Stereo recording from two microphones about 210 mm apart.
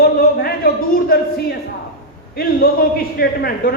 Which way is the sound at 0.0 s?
45° left (ahead or behind).